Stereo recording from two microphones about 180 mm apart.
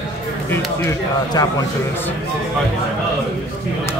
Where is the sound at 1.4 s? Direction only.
20° left (ahead or behind).